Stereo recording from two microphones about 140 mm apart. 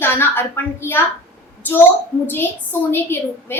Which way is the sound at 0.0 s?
15° left (ahead or behind).